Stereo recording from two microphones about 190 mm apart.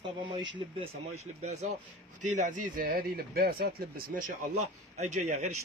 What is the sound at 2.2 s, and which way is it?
Speech, 40° right (ahead or behind).